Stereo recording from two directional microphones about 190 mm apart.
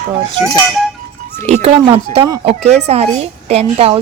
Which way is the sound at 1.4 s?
35° right (ahead or behind).